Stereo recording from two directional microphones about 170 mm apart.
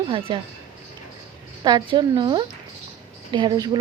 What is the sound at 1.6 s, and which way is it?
A woman's voice, 25° right (ahead or behind).